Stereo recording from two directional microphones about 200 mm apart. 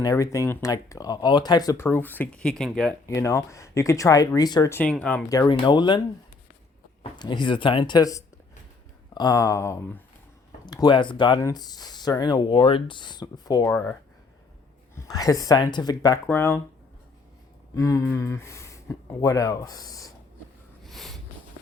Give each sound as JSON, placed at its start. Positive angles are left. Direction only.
{"t": 0.0, "sound": "speech", "side_deg": 15}
{"t": 3.1, "sound": "speech", "side_deg": 15}
{"t": 7.0, "sound": "speech", "side_deg": 20}
{"t": 14.9, "sound": "speech", "side_deg": 20}
{"t": 17.7, "sound": "speech", "side_deg": 15}
{"t": 20.8, "sound": "snort", "side_deg": 0}